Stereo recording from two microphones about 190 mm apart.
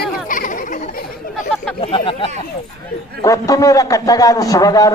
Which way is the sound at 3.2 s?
15° left (ahead or behind).